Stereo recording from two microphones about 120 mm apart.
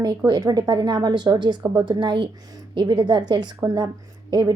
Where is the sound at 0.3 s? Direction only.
35° right (ahead or behind).